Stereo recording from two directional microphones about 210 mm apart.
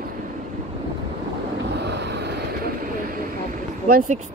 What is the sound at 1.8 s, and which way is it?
Vehicle, 55° right (ahead or behind).